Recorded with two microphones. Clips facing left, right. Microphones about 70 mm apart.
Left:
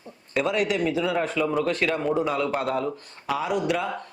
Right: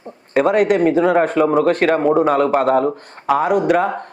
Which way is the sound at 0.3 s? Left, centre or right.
Right.